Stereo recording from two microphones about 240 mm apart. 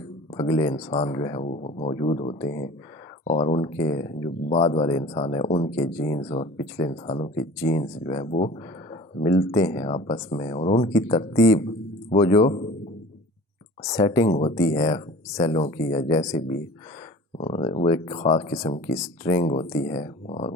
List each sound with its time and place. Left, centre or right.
0.3 s speech: centre
13.8 s speech: centre
14.3 s speech: left
14.5 s speech: centre
17.3 s speech: left